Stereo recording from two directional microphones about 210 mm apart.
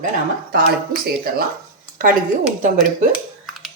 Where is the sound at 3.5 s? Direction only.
Centre (ahead or behind).